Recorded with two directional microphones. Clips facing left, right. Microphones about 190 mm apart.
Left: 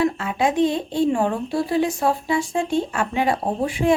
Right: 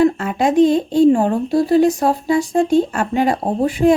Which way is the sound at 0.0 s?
45° right (ahead or behind).